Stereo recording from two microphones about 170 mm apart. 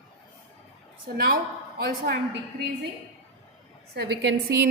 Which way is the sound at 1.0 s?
60° right (ahead or behind).